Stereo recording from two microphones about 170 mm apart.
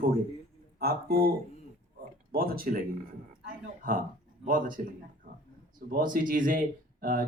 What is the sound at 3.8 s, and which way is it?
Speech, 55° right (ahead or behind).